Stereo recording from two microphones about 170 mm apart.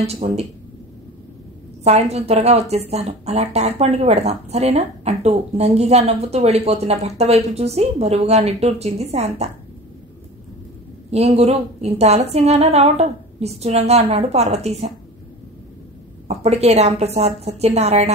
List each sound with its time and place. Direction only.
0.0 s speech: 40° right (ahead or behind)
1.9 s speech: 40° right (ahead or behind)
11.1 s speech: 40° right (ahead or behind)
16.3 s speech: 40° right (ahead or behind)